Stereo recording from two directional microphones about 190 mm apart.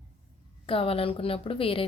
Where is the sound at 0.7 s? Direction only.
30° left (ahead or behind).